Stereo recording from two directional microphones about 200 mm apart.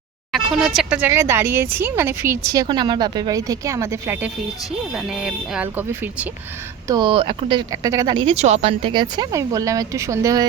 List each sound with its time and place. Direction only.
0.3 s speech: centre (ahead or behind)
6.8 s speech: 20° right (ahead or behind)